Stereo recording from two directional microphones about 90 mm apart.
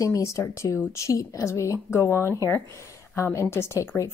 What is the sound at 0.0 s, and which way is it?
Speech, 35° left (ahead or behind).